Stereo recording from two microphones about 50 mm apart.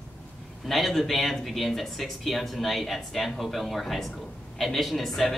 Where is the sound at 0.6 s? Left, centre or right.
Centre.